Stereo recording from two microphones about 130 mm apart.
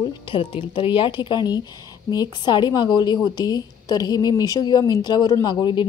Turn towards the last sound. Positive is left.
turn(degrees=35)  # may be behind; listen again after turning